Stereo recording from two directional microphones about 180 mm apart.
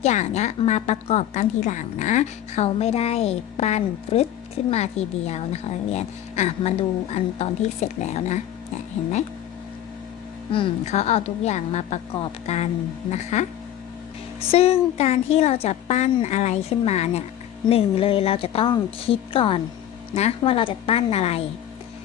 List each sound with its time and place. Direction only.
0.0 s a woman's voice: 40° left (ahead or behind)
10.5 s a woman's voice: 35° left (ahead or behind)
14.5 s a woman's voice: 35° left (ahead or behind)